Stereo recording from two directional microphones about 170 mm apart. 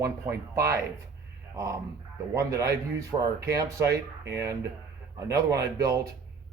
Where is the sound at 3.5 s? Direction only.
20° right (ahead or behind).